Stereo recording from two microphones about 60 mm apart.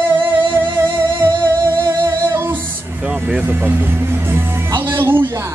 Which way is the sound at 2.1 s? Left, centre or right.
Right.